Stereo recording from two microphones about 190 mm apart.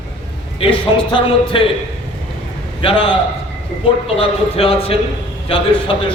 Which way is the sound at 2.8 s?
25° left (ahead or behind).